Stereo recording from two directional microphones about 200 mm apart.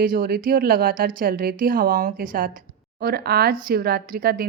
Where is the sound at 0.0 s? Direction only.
45° right (ahead or behind).